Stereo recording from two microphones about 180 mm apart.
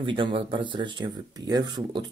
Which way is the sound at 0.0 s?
30° right (ahead or behind).